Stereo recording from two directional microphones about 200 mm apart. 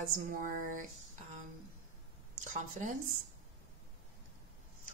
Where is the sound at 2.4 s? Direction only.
40° right (ahead or behind).